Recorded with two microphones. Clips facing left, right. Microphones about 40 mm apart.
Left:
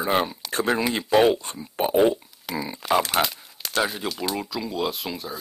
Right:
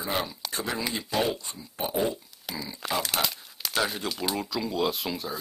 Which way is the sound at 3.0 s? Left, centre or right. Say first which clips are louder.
Left 6 dB; centre.